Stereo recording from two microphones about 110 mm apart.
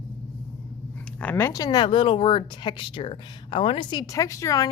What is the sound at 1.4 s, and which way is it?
Speech, 30° left (ahead or behind).